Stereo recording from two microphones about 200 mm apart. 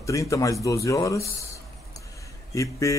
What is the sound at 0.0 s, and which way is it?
Speech, 15° left (ahead or behind).